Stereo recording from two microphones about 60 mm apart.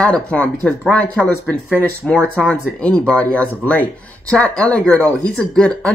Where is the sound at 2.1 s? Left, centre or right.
Left.